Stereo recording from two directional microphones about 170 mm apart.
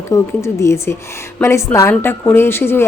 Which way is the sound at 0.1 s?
20° left (ahead or behind).